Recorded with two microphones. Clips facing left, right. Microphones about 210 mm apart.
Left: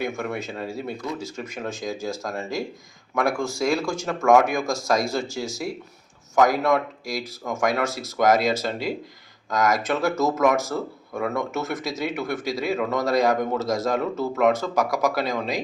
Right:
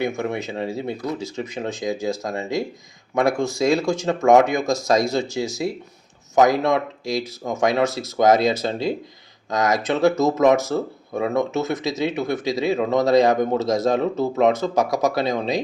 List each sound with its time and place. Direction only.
0.0 s speech: 25° right (ahead or behind)